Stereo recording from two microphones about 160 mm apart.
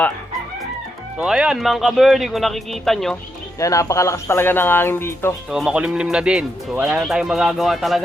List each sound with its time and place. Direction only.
1.2 s speech: 5° right (ahead or behind)
3.6 s speech: 20° left (ahead or behind)
5.5 s speech: 5° right (ahead or behind)